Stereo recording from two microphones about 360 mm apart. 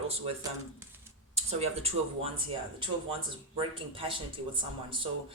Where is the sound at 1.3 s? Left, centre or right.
Centre.